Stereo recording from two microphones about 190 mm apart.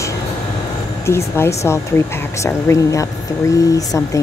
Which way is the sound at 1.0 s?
15° left (ahead or behind).